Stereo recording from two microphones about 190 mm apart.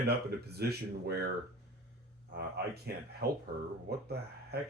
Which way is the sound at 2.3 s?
60° right (ahead or behind).